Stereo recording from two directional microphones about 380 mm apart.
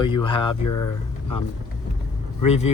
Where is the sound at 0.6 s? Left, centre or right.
Left.